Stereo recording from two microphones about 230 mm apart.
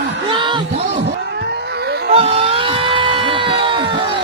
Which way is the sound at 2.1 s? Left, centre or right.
Right.